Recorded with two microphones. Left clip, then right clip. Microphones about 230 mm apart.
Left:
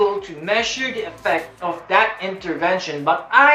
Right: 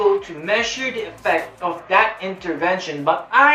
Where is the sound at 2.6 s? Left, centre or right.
Centre.